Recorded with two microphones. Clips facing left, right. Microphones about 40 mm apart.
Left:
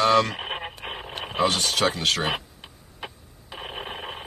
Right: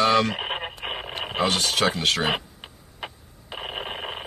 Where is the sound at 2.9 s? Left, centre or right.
Right.